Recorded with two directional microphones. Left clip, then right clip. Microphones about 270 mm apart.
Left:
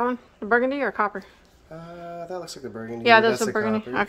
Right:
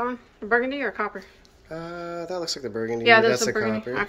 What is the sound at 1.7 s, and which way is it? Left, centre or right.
Speech, centre.